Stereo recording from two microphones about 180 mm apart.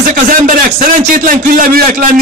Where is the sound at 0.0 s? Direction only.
50° right (ahead or behind).